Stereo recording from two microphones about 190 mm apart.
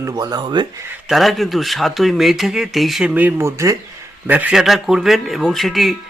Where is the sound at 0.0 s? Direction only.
20° right (ahead or behind).